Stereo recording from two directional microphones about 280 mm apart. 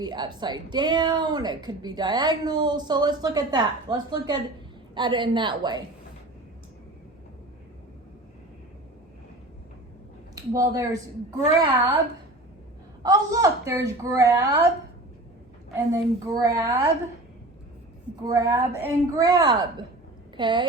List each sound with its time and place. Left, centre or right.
0.0 s a woman's voice: centre
10.3 s a woman's voice: centre
13.0 s a woman's voice: centre
15.7 s a woman's voice: centre
18.2 s a woman's voice: centre